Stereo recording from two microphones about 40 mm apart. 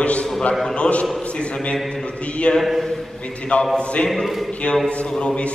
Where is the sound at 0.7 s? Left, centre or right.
Left.